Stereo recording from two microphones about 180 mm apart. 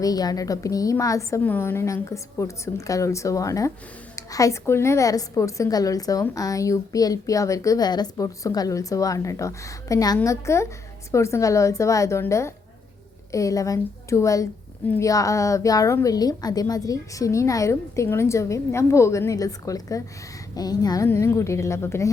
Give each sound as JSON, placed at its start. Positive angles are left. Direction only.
{"t": 0.0, "sound": "a woman's voice", "side_deg": 20}